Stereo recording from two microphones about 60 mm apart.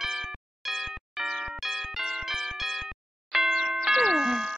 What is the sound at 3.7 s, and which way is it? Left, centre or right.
Music, centre.